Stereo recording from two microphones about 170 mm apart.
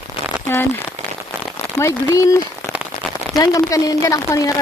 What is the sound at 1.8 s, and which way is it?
Speech, 20° left (ahead or behind).